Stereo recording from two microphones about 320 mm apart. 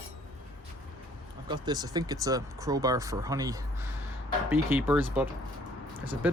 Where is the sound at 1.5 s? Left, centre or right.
Centre.